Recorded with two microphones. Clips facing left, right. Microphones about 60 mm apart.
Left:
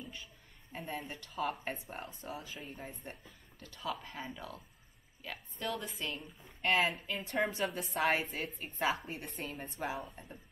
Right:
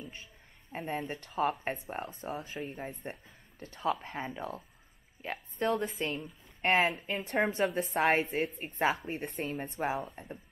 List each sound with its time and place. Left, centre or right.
0.7 s a woman's voice: right
10.0 s speech: right